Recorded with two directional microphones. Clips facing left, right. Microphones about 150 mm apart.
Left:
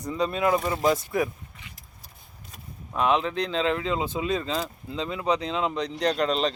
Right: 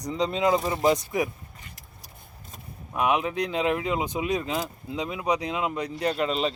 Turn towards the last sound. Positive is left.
turn(degrees=-5)  # may be behind; listen again after turning